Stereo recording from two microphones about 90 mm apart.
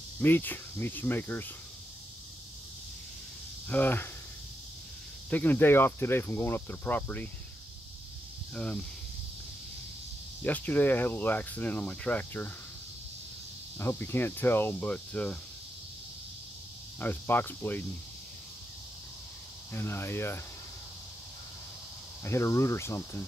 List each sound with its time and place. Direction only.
0.2 s speech: 20° left (ahead or behind)
3.6 s speech: 20° left (ahead or behind)
5.3 s speech: 20° left (ahead or behind)
8.5 s speech: 10° left (ahead or behind)
10.4 s speech: 20° left (ahead or behind)
13.7 s speech: 25° left (ahead or behind)
17.0 s speech: 20° left (ahead or behind)
19.7 s speech: 25° left (ahead or behind)
22.2 s speech: 30° left (ahead or behind)